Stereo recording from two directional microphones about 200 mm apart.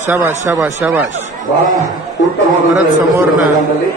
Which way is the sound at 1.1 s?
35° right (ahead or behind).